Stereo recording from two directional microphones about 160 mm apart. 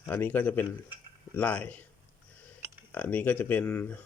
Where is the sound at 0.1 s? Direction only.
10° left (ahead or behind).